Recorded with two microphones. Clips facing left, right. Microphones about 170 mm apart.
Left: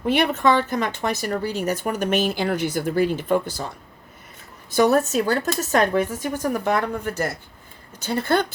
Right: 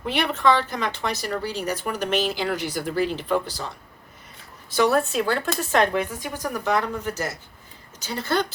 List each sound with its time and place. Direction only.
0.0 s speech: 50° left (ahead or behind)
4.7 s a woman's voice: 45° left (ahead or behind)